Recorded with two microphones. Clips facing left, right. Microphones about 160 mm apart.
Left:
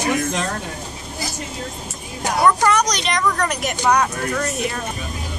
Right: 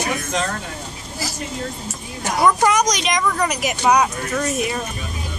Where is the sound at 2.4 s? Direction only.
10° right (ahead or behind).